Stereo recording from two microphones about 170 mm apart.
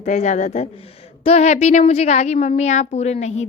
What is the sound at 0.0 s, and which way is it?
A woman's voice, 45° left (ahead or behind).